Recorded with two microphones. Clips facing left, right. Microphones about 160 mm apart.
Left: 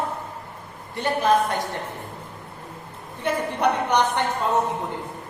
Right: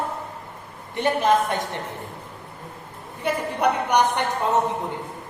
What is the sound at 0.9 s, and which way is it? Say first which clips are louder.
Speech: right 1 dB; 20° right (ahead or behind).